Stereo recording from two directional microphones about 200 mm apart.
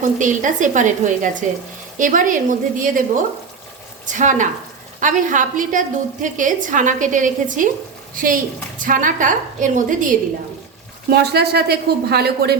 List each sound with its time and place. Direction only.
0.0 s a woman's voice: 40° right (ahead or behind)
11.1 s speech: 55° right (ahead or behind)